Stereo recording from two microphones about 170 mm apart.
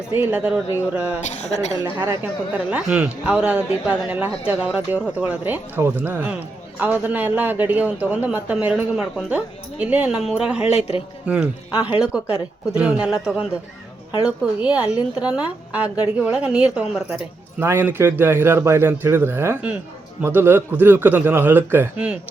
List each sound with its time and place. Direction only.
0.1 s a man's voice: 10° right (ahead or behind)
1.8 s speech: 25° right (ahead or behind)
2.2 s a man's voice: 5° right (ahead or behind)
10.8 s a man's voice: 40° left (ahead or behind)
11.8 s a man's voice: 5° right (ahead or behind)